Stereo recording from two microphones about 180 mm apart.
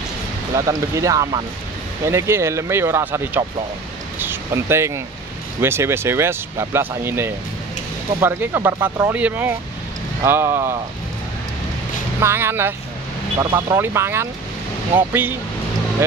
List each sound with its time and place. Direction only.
0.7 s speech: 20° right (ahead or behind)
12.2 s speech: 15° right (ahead or behind)